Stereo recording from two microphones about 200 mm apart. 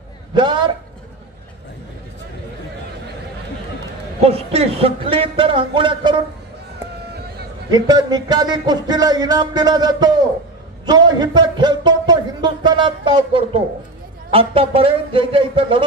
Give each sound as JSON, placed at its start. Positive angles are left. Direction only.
{"t": 0.3, "sound": "a sound", "side_deg": -25}
{"t": 4.2, "sound": "speech", "side_deg": -30}
{"t": 7.7, "sound": "speech", "side_deg": -20}